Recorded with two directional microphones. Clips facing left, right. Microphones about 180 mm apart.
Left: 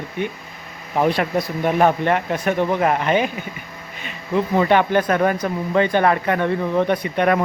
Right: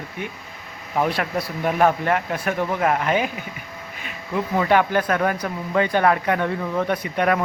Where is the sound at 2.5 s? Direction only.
25° left (ahead or behind).